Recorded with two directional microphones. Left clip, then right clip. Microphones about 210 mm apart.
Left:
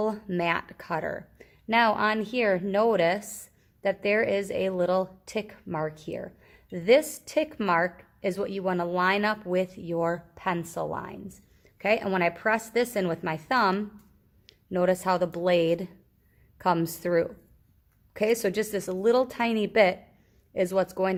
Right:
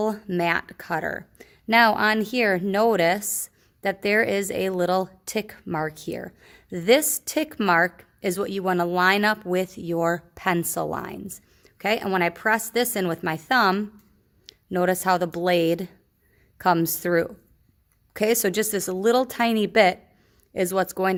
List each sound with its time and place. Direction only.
0.0 s speech: 30° right (ahead or behind)
11.6 s speech: 35° right (ahead or behind)